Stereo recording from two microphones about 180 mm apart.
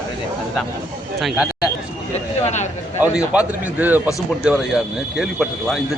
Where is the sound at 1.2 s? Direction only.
5° right (ahead or behind).